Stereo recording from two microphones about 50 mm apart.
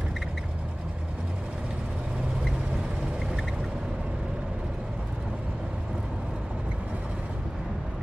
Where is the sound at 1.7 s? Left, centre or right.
Centre.